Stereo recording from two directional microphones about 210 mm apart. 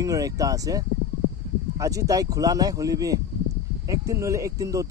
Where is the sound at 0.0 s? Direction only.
15° right (ahead or behind).